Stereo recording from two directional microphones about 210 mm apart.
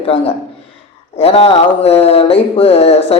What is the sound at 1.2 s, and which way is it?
A man's voice, 30° left (ahead or behind).